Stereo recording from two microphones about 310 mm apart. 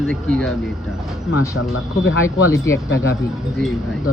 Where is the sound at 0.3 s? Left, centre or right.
Centre.